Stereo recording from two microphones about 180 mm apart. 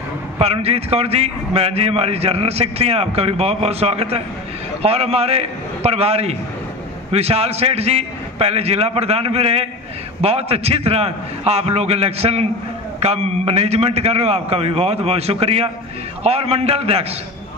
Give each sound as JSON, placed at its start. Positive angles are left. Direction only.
{"t": 0.4, "sound": "a man's voice", "side_deg": -35}